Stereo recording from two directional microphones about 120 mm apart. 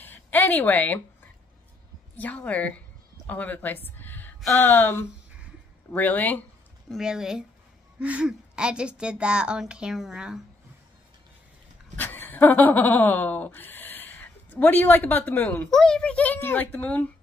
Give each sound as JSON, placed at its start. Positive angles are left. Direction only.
{"t": 0.0, "sound": "speech", "side_deg": 15}
{"t": 2.1, "sound": "a child's voice", "side_deg": 15}
{"t": 6.9, "sound": "a woman's voice", "side_deg": -5}
{"t": 12.0, "sound": "speech", "side_deg": 15}
{"t": 15.7, "sound": "a child's voice", "side_deg": 5}